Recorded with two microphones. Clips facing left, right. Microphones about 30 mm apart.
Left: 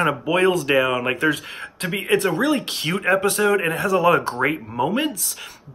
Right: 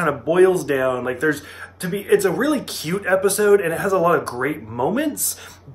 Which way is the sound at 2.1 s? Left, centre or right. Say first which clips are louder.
Right 2 dB; left.